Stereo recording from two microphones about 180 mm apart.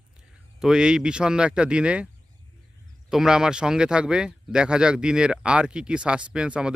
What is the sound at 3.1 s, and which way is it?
Speech, 5° right (ahead or behind).